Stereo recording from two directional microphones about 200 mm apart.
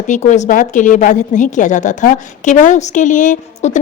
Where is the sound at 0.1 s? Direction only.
35° left (ahead or behind).